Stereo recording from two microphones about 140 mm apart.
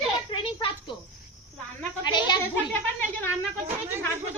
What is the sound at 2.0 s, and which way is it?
Speech, 30° left (ahead or behind).